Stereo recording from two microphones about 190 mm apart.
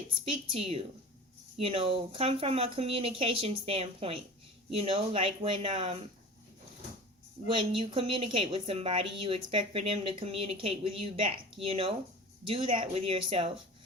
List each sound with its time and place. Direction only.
0.5 s a woman's voice: 30° right (ahead or behind)
7.4 s a woman's voice: 30° right (ahead or behind)